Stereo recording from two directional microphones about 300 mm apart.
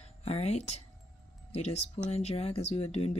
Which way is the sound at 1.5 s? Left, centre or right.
Left.